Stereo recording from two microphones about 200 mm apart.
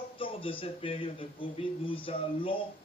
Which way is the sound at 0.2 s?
25° left (ahead or behind).